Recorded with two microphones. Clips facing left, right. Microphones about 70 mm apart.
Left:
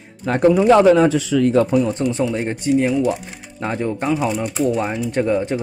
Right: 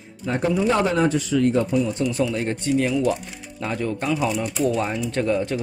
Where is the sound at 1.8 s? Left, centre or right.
Left.